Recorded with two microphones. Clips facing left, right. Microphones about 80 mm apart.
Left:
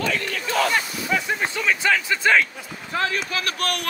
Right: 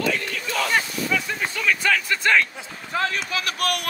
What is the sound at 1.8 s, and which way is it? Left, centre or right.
Speech, centre.